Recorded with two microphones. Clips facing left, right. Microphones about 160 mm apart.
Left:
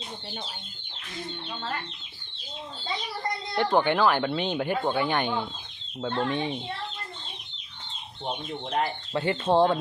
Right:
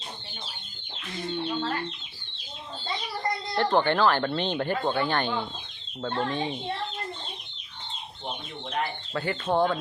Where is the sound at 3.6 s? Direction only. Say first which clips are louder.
Even; 10° left (ahead or behind).